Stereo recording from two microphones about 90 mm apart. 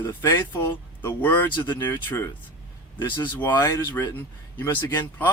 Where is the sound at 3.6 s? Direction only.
40° left (ahead or behind).